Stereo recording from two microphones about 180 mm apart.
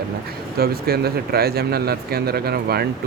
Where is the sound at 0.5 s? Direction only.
60° right (ahead or behind).